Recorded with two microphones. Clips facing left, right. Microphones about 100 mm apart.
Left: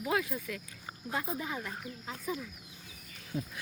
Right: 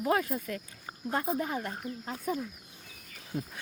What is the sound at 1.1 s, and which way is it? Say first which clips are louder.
Speech: right 5 dB; 50° right (ahead or behind).